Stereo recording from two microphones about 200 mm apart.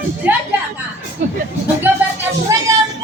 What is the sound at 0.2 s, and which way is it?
Speech, 10° right (ahead or behind).